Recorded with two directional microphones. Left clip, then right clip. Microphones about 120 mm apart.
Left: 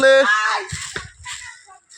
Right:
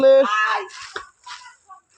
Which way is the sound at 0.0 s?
25° right (ahead or behind).